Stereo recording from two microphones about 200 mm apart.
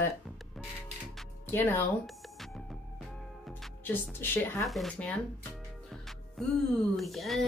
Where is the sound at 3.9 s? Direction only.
10° left (ahead or behind).